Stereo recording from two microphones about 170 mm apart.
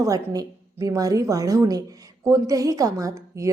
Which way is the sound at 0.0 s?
20° right (ahead or behind).